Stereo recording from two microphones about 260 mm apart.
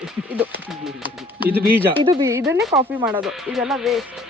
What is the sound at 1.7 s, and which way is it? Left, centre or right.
Speech, centre.